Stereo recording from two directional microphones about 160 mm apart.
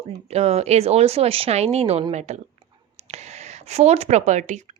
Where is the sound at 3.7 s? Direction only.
40° right (ahead or behind).